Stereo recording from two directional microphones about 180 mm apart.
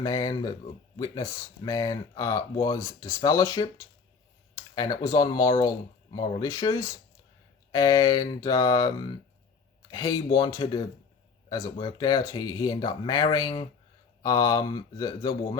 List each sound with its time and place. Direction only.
0.0 s speech: 20° left (ahead or behind)